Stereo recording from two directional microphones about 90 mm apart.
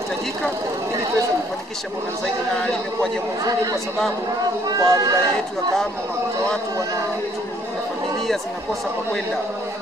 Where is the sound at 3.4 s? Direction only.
40° right (ahead or behind).